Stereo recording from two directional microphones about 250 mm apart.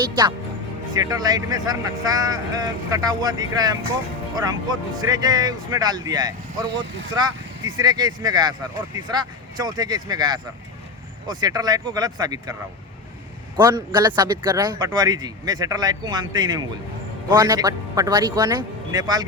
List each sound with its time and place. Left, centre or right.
0.0 s speech: centre
13.6 s speech: centre